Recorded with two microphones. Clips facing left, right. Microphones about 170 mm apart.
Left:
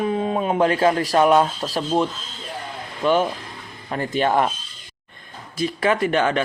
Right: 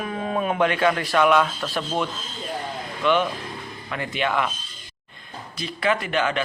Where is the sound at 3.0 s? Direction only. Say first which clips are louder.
Left 2 dB; 40° left (ahead or behind).